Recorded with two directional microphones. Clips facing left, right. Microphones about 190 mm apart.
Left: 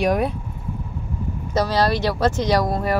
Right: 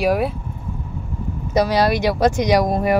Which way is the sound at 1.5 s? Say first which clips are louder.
Right 3 dB; 15° right (ahead or behind).